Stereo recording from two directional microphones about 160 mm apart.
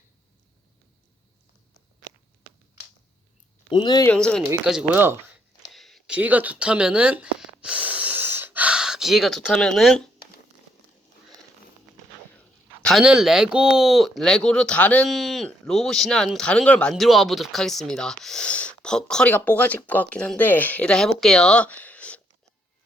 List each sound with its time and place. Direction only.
3.7 s speech: 30° left (ahead or behind)
4.0 s speech: 5° left (ahead or behind)
4.6 s speech: 5° right (ahead or behind)
5.7 s a sound: centre (ahead or behind)
12.8 s speech: centre (ahead or behind)